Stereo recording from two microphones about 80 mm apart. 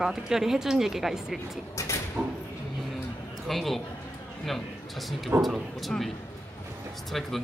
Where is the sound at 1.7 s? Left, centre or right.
Left.